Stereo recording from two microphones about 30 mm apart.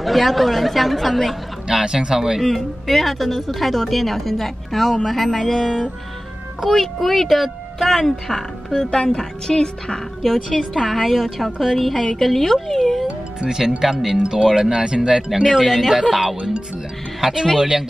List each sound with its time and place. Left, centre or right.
0.0 s a woman's voice: centre
1.7 s speech: right
2.5 s a woman's voice: centre
6.6 s speech: centre
9.1 s speech: left
10.2 s a woman's voice: centre
13.4 s speech: centre
15.4 s a woman's voice: centre
17.2 s speech: right